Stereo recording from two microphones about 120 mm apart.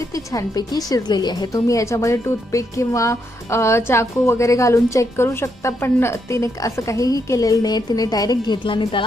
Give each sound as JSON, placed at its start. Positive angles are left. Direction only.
{"t": 0.0, "sound": "a woman's voice", "side_deg": 25}